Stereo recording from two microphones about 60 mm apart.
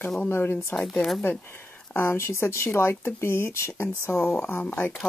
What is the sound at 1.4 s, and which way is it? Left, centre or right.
Speech, left.